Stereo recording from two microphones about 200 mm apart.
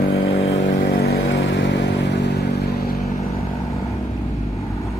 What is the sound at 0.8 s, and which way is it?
Vehicle, 50° left (ahead or behind).